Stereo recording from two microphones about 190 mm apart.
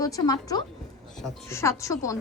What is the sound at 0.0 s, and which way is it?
Speech, 20° left (ahead or behind).